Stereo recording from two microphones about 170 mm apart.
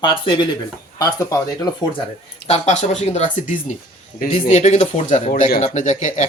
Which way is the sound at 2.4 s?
40° left (ahead or behind).